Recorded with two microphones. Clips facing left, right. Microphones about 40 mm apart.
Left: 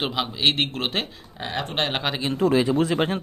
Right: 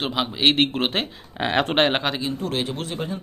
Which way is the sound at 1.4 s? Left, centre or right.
Right.